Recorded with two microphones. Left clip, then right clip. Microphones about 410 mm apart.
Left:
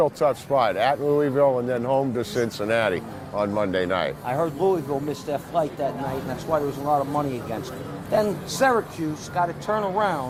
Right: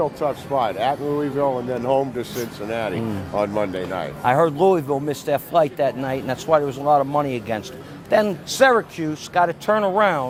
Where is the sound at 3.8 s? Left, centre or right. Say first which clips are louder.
Left 3 dB; left.